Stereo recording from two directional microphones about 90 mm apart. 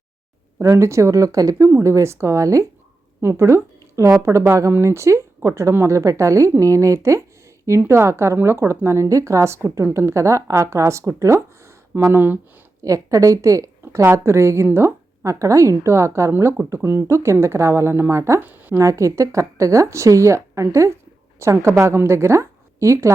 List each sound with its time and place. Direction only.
0.6 s speech: 35° right (ahead or behind)
12.8 s speech: 40° right (ahead or behind); by 18.8 s 20° right (ahead or behind)
18.8 s a woman's voice: 35° right (ahead or behind)